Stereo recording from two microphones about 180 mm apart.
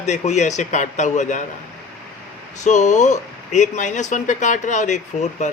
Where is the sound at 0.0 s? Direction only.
40° left (ahead or behind).